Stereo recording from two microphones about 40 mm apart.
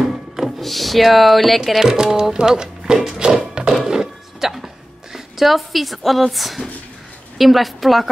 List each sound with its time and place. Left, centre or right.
0.6 s speech: centre
1.6 s speech: centre
3.2 s music: right
3.7 s a sound: centre
5.1 s speech: centre